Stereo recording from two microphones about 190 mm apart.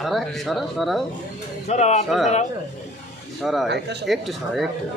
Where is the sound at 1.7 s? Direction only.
35° left (ahead or behind).